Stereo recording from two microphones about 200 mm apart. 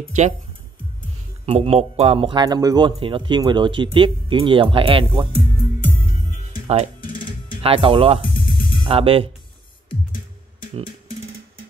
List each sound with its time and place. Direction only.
0.0 s speech: 35° right (ahead or behind)
1.4 s speech: 30° right (ahead or behind)
7.6 s speech: 25° right (ahead or behind)